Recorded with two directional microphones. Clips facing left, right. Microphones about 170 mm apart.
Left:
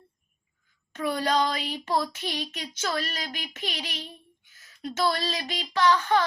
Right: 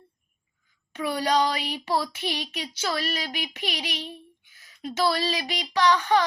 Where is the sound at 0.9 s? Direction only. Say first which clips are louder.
Right 1 dB; 15° right (ahead or behind).